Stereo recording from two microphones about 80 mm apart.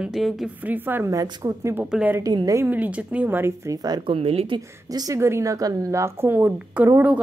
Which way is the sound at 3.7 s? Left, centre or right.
Right.